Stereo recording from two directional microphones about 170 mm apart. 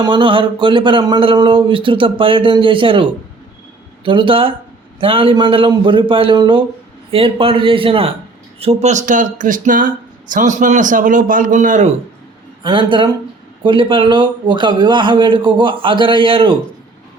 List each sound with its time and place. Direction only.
0.0 s a man's voice: 30° right (ahead or behind); by 11.9 s 45° right (ahead or behind)
12.6 s speech: 30° right (ahead or behind)